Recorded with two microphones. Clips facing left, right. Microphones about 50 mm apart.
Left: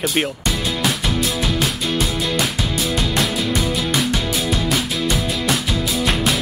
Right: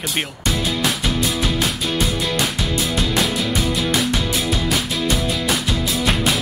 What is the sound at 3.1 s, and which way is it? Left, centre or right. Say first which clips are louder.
Music: even; centre.